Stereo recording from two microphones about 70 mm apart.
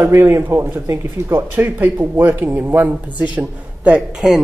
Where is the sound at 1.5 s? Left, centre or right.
Right.